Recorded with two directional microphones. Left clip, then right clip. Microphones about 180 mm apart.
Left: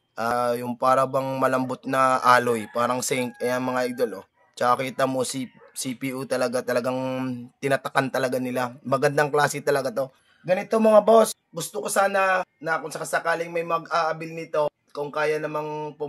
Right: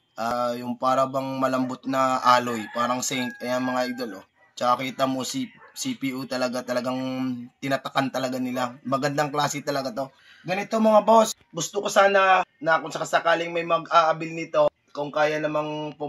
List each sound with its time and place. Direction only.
0.1 s speech: 50° left (ahead or behind)
11.7 s speech: 20° left (ahead or behind)